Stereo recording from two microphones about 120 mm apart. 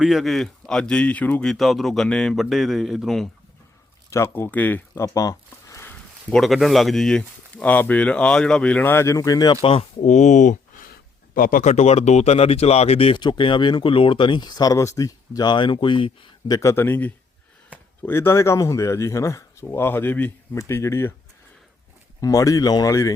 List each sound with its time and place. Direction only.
0.0 s speech: centre (ahead or behind)
4.1 s speech: 20° left (ahead or behind)
4.9 s a sound: 25° left (ahead or behind)
6.3 s speech: centre (ahead or behind); by 9.6 s 30° left (ahead or behind)
10.0 s speech: 80° left; by 13.2 s 50° left (ahead or behind)
13.2 s speech: 40° left (ahead or behind)
16.6 s speech: 20° left (ahead or behind)
22.2 s speech: 30° left (ahead or behind)